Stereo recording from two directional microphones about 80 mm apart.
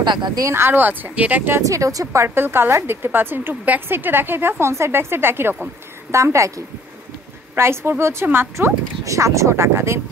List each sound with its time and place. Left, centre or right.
0.0 s speech: right
0.4 s a woman's voice: right
1.6 s speech: right
2.2 s a woman's voice: right
6.1 s speech: right